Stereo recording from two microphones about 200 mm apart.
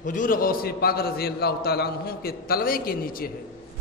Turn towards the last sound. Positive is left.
turn(degrees=45)  # may be behind; listen again after turning